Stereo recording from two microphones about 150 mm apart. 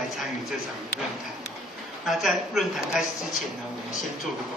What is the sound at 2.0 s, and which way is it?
A woman's voice, centre (ahead or behind).